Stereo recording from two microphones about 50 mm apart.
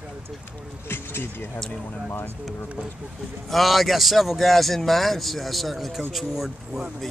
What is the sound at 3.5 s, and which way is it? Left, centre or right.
Speech, centre.